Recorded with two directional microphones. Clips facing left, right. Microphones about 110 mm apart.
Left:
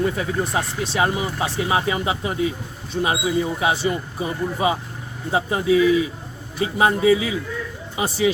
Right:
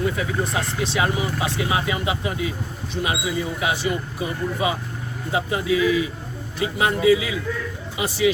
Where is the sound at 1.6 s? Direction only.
30° left (ahead or behind).